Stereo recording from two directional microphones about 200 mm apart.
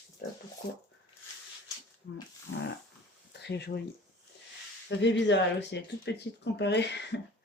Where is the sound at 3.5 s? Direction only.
55° left (ahead or behind).